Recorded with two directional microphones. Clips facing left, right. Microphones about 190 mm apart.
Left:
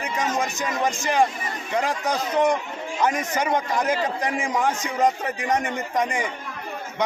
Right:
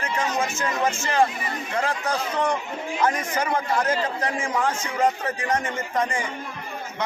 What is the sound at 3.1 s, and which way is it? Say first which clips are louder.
Speech: left 1 dB; 20° left (ahead or behind).